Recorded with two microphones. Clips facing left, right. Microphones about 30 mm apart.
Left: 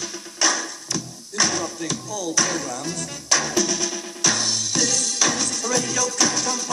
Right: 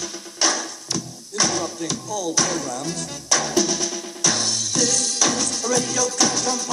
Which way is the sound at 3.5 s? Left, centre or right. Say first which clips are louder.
Right 1 dB; left.